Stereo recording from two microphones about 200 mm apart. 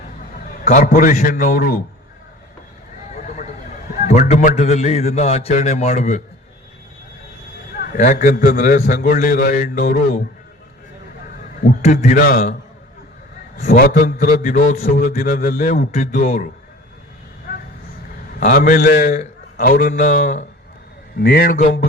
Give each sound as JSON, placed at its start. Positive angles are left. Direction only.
{"t": 0.6, "sound": "a man's voice", "side_deg": 40}
{"t": 3.2, "sound": "a man's voice", "side_deg": 35}
{"t": 7.9, "sound": "a man's voice", "side_deg": 40}
{"t": 11.6, "sound": "a man's voice", "side_deg": 40}
{"t": 13.6, "sound": "a man's voice", "side_deg": 50}
{"t": 18.3, "sound": "a man's voice", "side_deg": 40}
{"t": 21.2, "sound": "a man's voice", "side_deg": 50}